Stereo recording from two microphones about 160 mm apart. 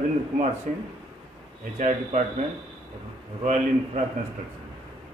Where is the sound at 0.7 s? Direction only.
55° right (ahead or behind).